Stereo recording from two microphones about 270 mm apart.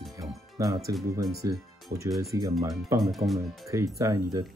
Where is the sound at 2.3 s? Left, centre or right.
Centre.